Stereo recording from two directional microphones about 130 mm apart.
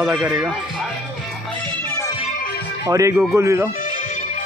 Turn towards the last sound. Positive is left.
turn(degrees=-20)  # may be behind; listen again after turning